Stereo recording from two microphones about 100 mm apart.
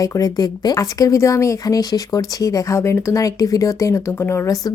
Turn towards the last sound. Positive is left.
turn(degrees=30)  # may be behind; listen again after turning